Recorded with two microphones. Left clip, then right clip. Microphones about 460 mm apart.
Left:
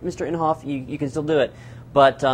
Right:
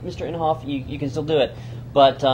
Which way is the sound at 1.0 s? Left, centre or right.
Left.